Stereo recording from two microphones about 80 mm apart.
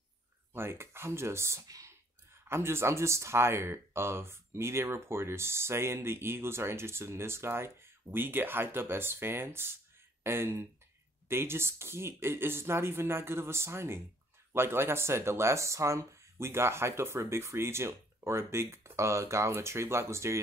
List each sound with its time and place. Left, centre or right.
0.5 s speech: right
1.7 s whispering: right
2.4 s speech: right